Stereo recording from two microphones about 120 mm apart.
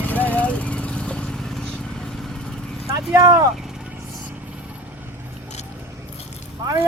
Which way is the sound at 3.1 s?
35° right (ahead or behind).